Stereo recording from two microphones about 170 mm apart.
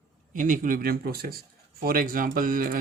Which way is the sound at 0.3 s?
50° right (ahead or behind).